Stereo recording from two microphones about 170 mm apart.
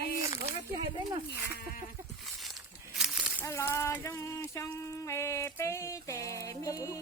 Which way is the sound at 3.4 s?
15° left (ahead or behind).